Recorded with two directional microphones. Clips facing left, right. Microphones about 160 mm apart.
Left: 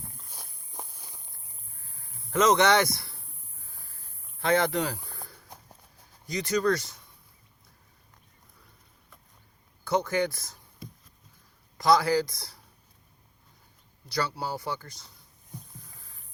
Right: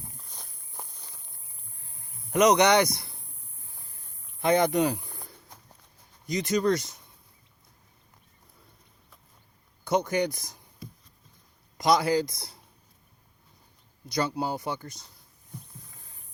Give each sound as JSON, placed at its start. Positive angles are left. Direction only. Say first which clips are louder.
{"t": 0.7, "sound": "walk", "louder": "left 2 dB", "side_deg": 15}
{"t": 1.8, "sound": "a sound", "louder": "right 1 dB", "side_deg": -20}
{"t": 4.4, "sound": "speech", "louder": "right 3 dB", "side_deg": -20}
{"t": 6.2, "sound": "speech", "louder": "right 1 dB", "side_deg": -20}
{"t": 9.8, "sound": "speech", "louder": "right 1 dB", "side_deg": -20}
{"t": 11.8, "sound": "speech", "louder": "even", "side_deg": -20}
{"t": 14.1, "sound": "speech", "louder": "right 3 dB", "side_deg": -20}